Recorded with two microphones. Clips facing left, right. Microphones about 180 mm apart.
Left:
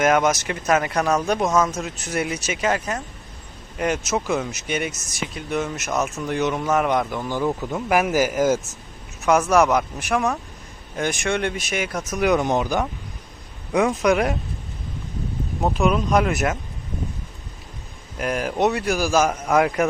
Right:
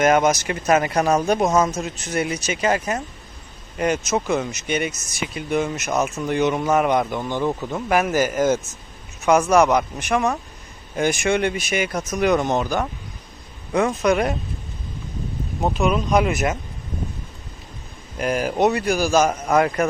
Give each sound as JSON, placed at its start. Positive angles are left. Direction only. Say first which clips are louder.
{"t": 0.0, "sound": "speech", "louder": "right 2 dB", "side_deg": 0}
{"t": 1.5, "sound": "speech", "louder": "even", "side_deg": -20}
{"t": 1.7, "sound": "speech", "louder": "right 1 dB", "side_deg": 0}
{"t": 14.1, "sound": "speech", "louder": "right 1 dB", "side_deg": 0}
{"t": 15.6, "sound": "speech", "louder": "even", "side_deg": 0}
{"t": 18.2, "sound": "speech", "louder": "right 2 dB", "side_deg": 0}